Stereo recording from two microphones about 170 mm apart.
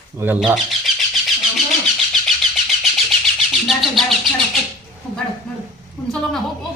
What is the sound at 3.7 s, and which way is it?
Bird, centre (ahead or behind).